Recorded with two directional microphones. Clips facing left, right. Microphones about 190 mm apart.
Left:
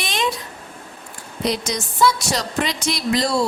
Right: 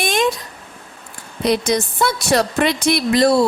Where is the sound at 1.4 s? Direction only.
55° right (ahead or behind).